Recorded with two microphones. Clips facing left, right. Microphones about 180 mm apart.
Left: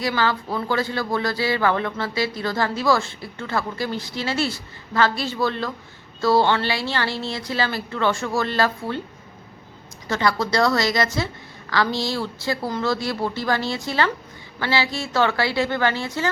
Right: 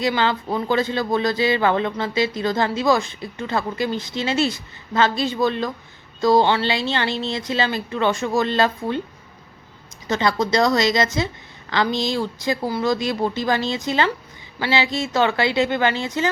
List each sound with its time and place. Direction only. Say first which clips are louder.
0.0 s speech: right 2 dB; 20° right (ahead or behind)
10.1 s speech: right 2 dB; 20° right (ahead or behind)